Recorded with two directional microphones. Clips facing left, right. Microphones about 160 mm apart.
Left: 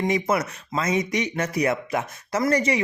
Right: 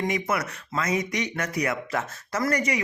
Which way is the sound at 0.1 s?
25° left (ahead or behind).